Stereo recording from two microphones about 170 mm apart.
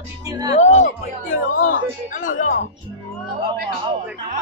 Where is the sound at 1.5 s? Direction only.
50° left (ahead or behind).